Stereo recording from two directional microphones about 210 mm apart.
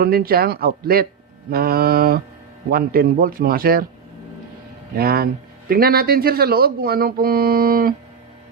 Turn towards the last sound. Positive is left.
turn(degrees=-45)  # may be behind; listen again after turning